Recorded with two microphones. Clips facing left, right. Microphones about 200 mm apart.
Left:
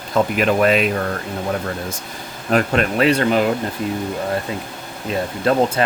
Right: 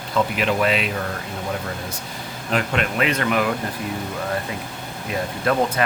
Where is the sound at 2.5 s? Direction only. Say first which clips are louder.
Left 5 dB; 40° left (ahead or behind).